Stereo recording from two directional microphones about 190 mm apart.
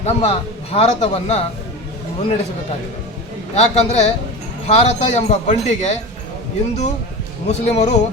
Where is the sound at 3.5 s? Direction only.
35° left (ahead or behind).